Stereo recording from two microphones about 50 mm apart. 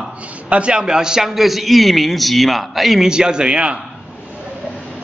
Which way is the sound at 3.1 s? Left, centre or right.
Centre.